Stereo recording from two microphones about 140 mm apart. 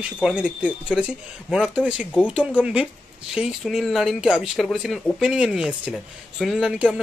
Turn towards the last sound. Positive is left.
turn(degrees=-5)  # may be behind; listen again after turning